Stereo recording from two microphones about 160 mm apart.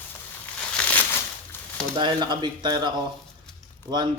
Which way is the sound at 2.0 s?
30° right (ahead or behind).